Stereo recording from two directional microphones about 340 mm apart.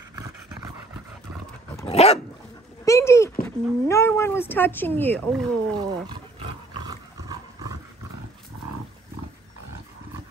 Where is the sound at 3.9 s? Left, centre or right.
Centre.